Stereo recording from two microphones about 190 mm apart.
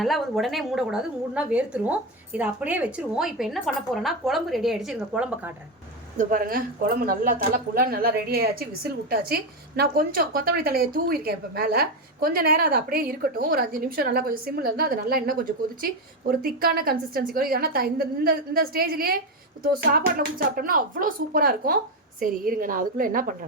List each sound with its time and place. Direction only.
0.0 s a woman's voice: centre (ahead or behind)
6.1 s a woman's voice: 45° right (ahead or behind)